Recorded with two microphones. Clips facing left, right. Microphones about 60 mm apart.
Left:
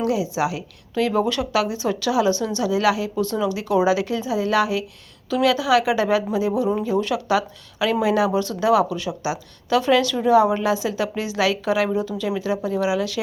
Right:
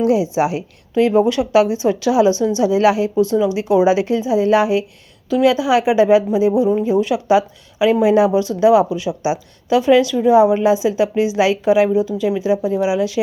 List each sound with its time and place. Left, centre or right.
0.0 s a woman's voice: right
3.2 s a woman's voice: centre